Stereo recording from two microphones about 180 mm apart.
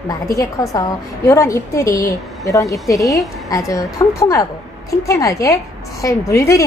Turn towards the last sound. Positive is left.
turn(degrees=15)  # may be behind; listen again after turning